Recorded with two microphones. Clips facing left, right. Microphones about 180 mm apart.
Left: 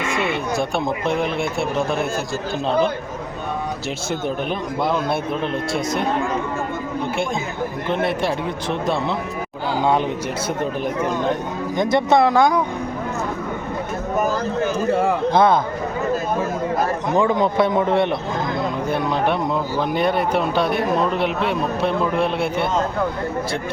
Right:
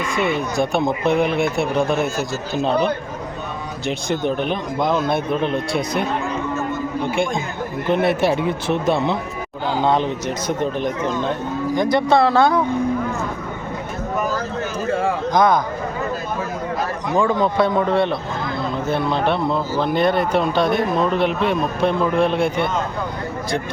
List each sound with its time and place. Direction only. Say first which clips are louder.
0.5 s speech: right 2 dB; centre (ahead or behind)
3.8 s speech: right 7 dB; 5° left (ahead or behind)
8.0 s speech: right 4 dB; 5° right (ahead or behind)
9.7 s speech: even; 10° left (ahead or behind)
15.3 s a man's voice: even; 30° left (ahead or behind)
17.2 s a man's voice: even; 20° left (ahead or behind); by 22.7 s 5° left (ahead or behind)